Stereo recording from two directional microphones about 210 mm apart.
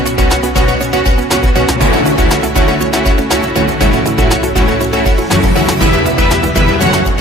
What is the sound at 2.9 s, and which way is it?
Music, centre (ahead or behind).